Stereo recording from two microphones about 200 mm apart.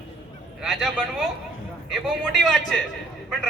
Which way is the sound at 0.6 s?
Centre (ahead or behind).